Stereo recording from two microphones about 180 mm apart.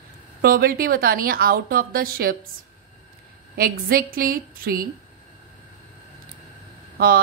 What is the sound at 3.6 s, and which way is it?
A woman's voice, 55° right (ahead or behind).